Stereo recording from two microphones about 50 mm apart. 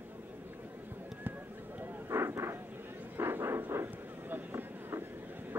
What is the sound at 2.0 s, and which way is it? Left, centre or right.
Vehicle, right.